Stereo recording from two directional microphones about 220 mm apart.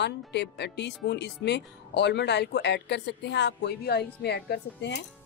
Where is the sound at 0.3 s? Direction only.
50° left (ahead or behind).